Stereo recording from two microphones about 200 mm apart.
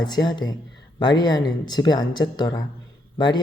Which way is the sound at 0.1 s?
20° left (ahead or behind).